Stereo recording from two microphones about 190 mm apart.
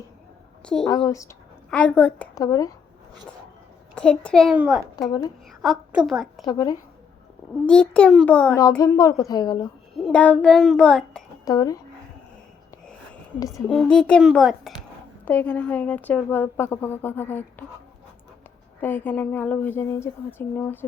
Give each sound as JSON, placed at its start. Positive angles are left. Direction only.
{"t": 0.6, "sound": "a woman's voice", "side_deg": 5}
{"t": 0.9, "sound": "speech", "side_deg": 15}
{"t": 2.4, "sound": "a woman's voice", "side_deg": 20}
{"t": 3.9, "sound": "child singing", "side_deg": 5}
{"t": 5.6, "sound": "a woman's voice", "side_deg": 0}
{"t": 6.4, "sound": "a woman's voice", "side_deg": 20}
{"t": 7.7, "sound": "child singing", "side_deg": 5}
{"t": 8.8, "sound": "speech", "side_deg": 20}
{"t": 10.0, "sound": "child singing", "side_deg": 5}
{"t": 11.4, "sound": "a woman's voice", "side_deg": 20}
{"t": 13.7, "sound": "child singing", "side_deg": 5}
{"t": 15.2, "sound": "speech", "side_deg": 10}
{"t": 18.8, "sound": "speech", "side_deg": 10}